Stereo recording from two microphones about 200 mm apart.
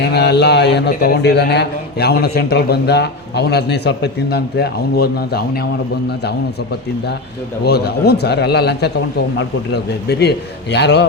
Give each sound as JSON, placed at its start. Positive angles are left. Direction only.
{"t": 0.0, "sound": "a man's voice", "side_deg": 55}